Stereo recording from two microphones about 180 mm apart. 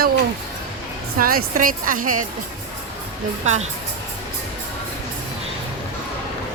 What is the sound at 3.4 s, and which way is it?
Speech, 40° right (ahead or behind).